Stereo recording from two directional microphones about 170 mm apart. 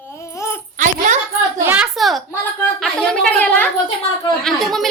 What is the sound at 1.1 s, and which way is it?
Speech, 45° right (ahead or behind).